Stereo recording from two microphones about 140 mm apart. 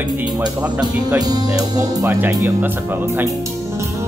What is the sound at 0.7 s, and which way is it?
Speech, 30° right (ahead or behind).